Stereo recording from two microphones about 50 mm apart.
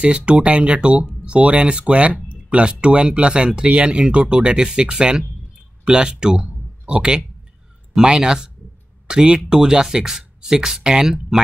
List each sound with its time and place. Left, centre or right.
0.0 s speech: right